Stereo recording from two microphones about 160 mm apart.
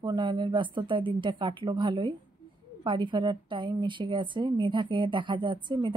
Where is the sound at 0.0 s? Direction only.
30° right (ahead or behind).